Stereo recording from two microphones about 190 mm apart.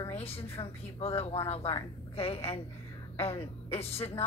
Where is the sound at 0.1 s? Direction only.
30° left (ahead or behind).